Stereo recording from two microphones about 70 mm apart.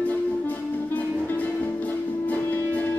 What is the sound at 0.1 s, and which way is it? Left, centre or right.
Music, left.